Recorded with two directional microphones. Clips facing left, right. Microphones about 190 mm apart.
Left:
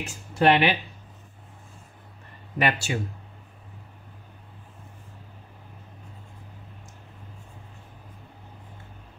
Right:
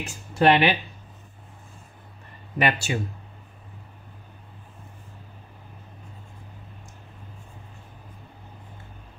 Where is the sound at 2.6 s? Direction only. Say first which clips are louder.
Right 1 dB; 20° right (ahead or behind).